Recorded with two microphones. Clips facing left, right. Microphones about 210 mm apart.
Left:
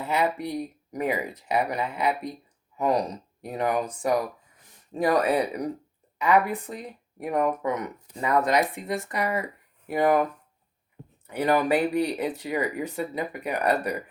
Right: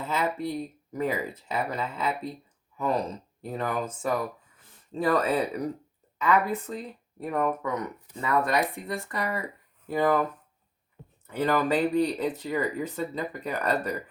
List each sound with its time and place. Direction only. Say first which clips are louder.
0.0 s speech: left 3 dB; 15° left (ahead or behind)
11.3 s speech: left 2 dB; 15° left (ahead or behind)